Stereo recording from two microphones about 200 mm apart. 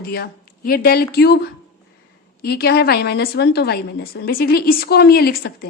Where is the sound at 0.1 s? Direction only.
50° left (ahead or behind).